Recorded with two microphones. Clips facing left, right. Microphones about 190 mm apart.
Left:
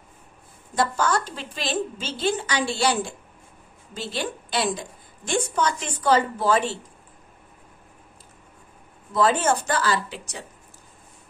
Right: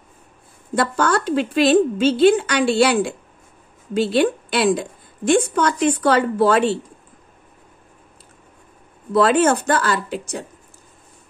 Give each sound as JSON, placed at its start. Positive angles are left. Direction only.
{"t": 0.7, "sound": "a woman's voice", "side_deg": -60}
{"t": 9.1, "sound": "a woman's voice", "side_deg": -65}